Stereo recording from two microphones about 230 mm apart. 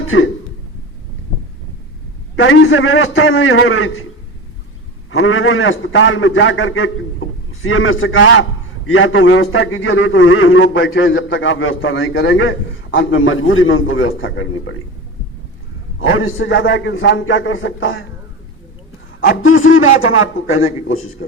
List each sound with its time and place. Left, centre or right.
2.3 s a man's voice: left
5.1 s a man's voice: left
16.0 s a man's voice: left
19.4 s a man's voice: left